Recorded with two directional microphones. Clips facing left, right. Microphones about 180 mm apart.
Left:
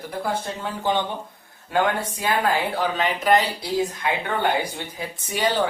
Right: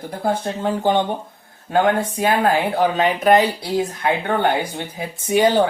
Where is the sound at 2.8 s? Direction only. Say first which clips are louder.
Right 6 dB; 50° right (ahead or behind).